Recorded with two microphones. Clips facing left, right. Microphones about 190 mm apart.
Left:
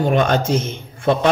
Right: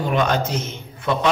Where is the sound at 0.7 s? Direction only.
50° left (ahead or behind).